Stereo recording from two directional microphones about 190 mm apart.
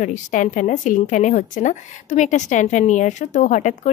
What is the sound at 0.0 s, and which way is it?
Speech, 40° left (ahead or behind).